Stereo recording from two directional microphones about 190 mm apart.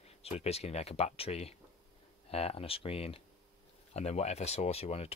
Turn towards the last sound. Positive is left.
turn(degrees=35)  # may be behind; listen again after turning